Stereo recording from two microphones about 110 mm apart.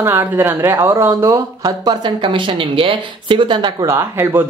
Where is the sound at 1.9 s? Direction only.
45° right (ahead or behind).